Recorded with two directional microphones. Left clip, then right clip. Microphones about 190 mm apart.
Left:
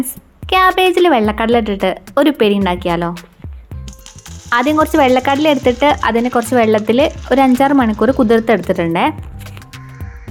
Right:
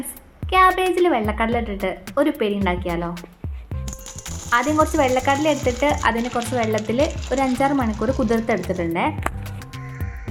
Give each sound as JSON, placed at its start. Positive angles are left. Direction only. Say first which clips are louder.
{"t": 0.9, "sound": "a woman's voice", "louder": "left 7 dB", "side_deg": 55}
{"t": 4.4, "sound": "speech", "louder": "left 5 dB", "side_deg": 50}